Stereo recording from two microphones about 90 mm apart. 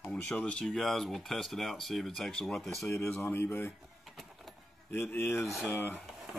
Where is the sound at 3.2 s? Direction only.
25° left (ahead or behind).